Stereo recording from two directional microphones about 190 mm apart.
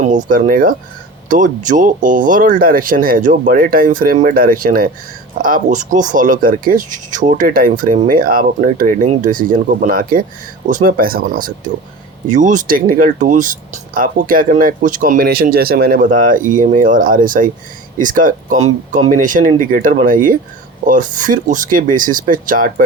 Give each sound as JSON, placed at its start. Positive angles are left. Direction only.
{"t": 0.0, "sound": "speech", "side_deg": -40}